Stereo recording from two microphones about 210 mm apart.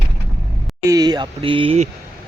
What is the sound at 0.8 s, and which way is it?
Speech, 15° right (ahead or behind).